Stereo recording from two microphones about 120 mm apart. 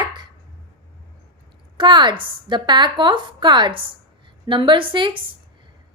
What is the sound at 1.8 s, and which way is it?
A woman's voice, 40° right (ahead or behind).